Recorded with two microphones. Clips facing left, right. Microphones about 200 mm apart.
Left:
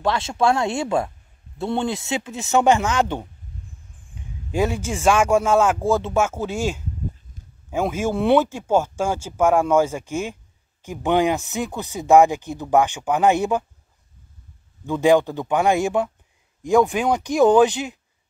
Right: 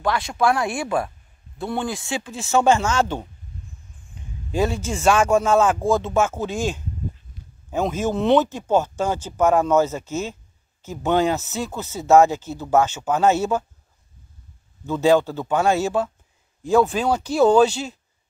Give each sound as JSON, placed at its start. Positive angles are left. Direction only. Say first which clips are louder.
{"t": 0.0, "sound": "speech", "louder": "left 1 dB", "side_deg": 25}
{"t": 4.5, "sound": "speech", "louder": "even", "side_deg": 10}
{"t": 14.9, "sound": "speech", "louder": "left 1 dB", "side_deg": 15}